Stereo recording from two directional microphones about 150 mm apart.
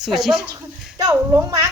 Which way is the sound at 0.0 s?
5° right (ahead or behind).